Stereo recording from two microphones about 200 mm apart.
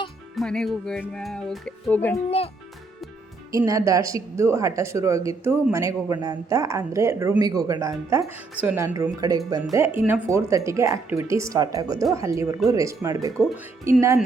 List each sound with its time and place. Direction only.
0.3 s speech: 5° left (ahead or behind)
3.5 s speech: 15° right (ahead or behind)